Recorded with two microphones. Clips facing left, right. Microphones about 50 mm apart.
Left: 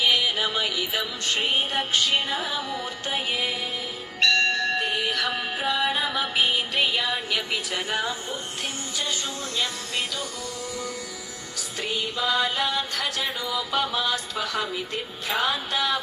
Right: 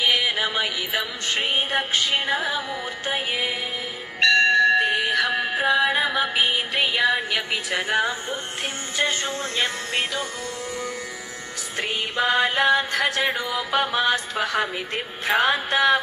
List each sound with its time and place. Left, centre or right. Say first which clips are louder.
0.0 s music: right 1 dB; right
4.2 s bell: right 5 dB; centre
5.2 s music: right 4 dB; centre
5.5 s carnatic music: right 6 dB; right
6.0 s music: right 3 dB; centre; by 10.2 s right
11.8 s music: right 4 dB; right